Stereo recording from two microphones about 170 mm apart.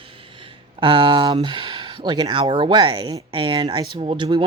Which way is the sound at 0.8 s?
30° right (ahead or behind).